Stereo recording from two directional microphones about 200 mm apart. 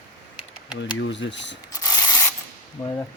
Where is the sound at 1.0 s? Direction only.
60° left (ahead or behind).